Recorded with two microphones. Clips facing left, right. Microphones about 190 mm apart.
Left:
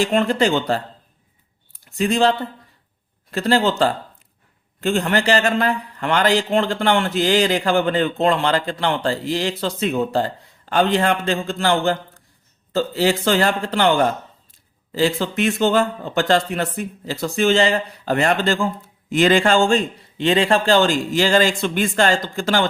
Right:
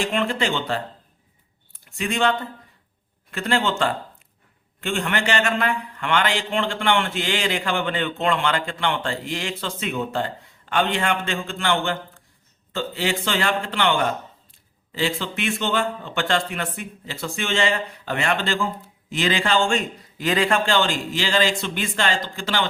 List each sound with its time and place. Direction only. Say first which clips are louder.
0.0 s a man's voice: left 6 dB; 40° left (ahead or behind)
1.7 s a sound: left 7 dB; 35° left (ahead or behind)
3.3 s a man's voice: left 5 dB; 35° left (ahead or behind)
20.1 s a man's voice: left 4 dB; 25° left (ahead or behind); by 22.6 s 45° left (ahead or behind)